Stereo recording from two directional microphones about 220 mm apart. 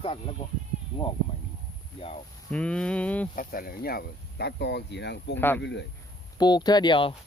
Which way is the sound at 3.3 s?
40° left (ahead or behind).